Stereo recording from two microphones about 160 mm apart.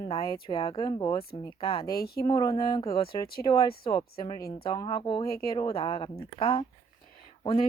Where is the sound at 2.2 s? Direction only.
20° left (ahead or behind).